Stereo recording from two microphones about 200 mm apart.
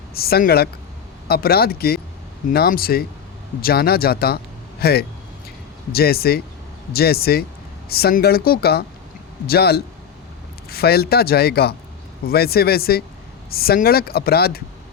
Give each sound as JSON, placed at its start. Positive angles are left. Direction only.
{"t": 0.1, "sound": "speech", "side_deg": 50}